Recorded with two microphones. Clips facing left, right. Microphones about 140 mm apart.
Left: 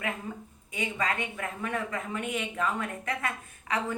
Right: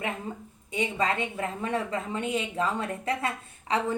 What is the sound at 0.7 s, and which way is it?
A woman's voice, 30° right (ahead or behind).